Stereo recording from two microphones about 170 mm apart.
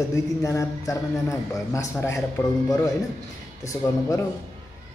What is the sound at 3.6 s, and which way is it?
Speech, 20° left (ahead or behind).